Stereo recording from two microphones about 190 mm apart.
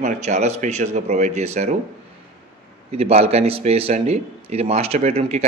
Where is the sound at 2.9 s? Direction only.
35° right (ahead or behind).